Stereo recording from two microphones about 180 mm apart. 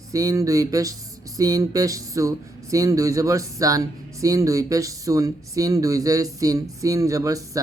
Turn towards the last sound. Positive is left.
turn(degrees=-20)  # may be behind; listen again after turning